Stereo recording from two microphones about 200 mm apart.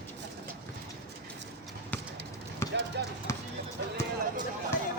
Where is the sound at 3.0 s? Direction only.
60° right (ahead or behind).